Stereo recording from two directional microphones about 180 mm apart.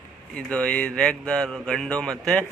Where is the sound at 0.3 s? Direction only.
5° left (ahead or behind).